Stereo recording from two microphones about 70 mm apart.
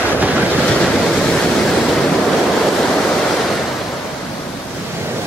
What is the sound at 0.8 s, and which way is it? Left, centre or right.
Waves, centre.